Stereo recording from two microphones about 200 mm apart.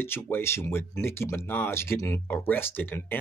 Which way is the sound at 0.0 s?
10° left (ahead or behind).